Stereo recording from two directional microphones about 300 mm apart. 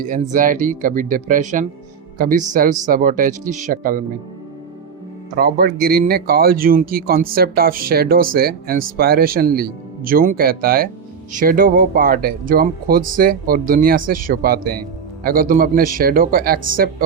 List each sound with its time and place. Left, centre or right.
0.0 s speech: right
5.4 s speech: right